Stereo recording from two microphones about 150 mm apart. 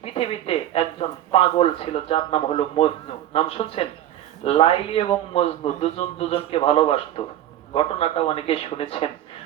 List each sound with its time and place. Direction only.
0.0 s speech: 40° left (ahead or behind)